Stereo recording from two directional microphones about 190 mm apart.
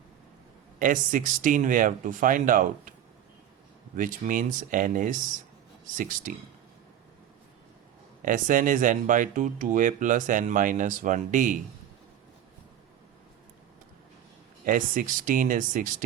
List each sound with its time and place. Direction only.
0.8 s speech: 45° right (ahead or behind)
3.9 s speech: 45° right (ahead or behind)
8.2 s speech: 45° right (ahead or behind)
14.6 s speech: 45° right (ahead or behind)